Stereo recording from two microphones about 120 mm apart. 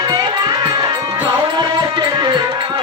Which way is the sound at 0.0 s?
35° right (ahead or behind).